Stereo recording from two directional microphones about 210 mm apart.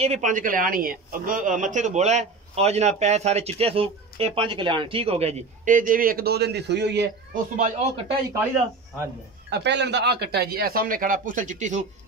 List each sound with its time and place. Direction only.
0.0 s speech: 35° right (ahead or behind); by 7.1 s 55° right (ahead or behind)
7.5 s speech: 35° right (ahead or behind)
9.5 s speech: 55° right (ahead or behind); by 11.8 s 35° right (ahead or behind)